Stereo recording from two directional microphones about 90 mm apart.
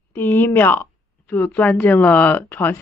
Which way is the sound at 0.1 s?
20° left (ahead or behind).